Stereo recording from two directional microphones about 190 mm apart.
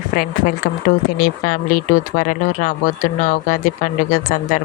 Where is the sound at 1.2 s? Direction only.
50° left (ahead or behind).